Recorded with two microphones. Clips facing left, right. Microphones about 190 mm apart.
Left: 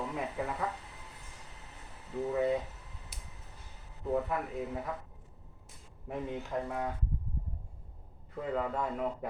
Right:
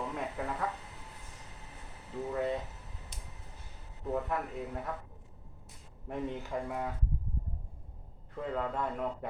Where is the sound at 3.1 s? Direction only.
5° left (ahead or behind).